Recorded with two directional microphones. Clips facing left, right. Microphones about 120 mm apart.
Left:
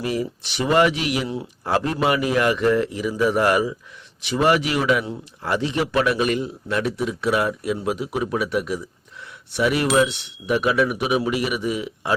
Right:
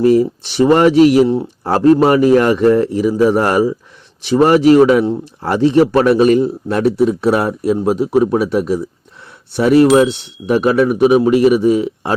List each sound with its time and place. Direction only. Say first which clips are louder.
0.0 s speech: right 14 dB; 35° right (ahead or behind)